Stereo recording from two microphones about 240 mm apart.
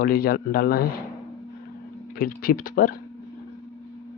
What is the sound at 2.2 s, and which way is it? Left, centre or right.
Speech, left.